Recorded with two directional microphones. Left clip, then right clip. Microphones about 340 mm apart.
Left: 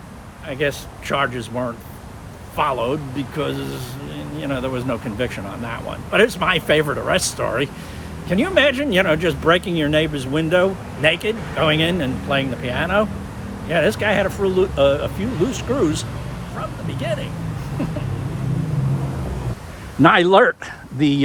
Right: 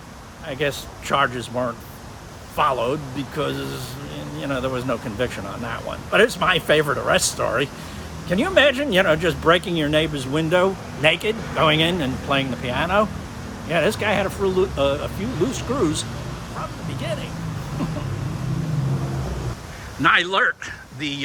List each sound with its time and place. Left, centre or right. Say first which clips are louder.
0.4 s speech: left 2 dB; centre
20.0 s speech: left 5 dB; centre